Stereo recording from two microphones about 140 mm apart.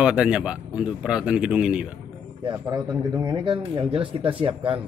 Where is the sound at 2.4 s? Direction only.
30° right (ahead or behind).